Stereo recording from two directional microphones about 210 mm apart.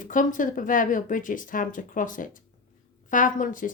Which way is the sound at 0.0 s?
40° left (ahead or behind).